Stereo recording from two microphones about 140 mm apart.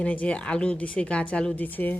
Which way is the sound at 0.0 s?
10° left (ahead or behind).